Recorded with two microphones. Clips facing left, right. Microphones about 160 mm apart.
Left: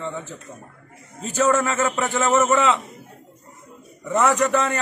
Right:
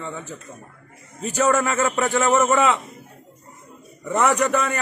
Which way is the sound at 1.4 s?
15° right (ahead or behind).